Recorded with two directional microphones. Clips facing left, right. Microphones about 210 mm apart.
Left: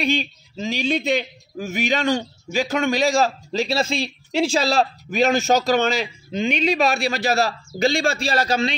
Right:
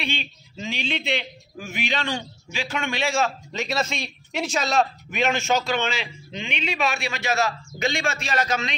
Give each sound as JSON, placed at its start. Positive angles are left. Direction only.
{"t": 0.0, "sound": "a man's voice", "side_deg": 40}